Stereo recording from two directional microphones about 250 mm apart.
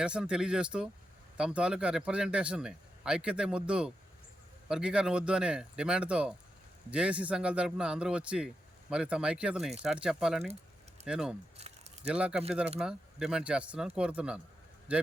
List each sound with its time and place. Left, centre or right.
0.0 s speech: centre
11.6 s a sound: right
12.0 s speech: centre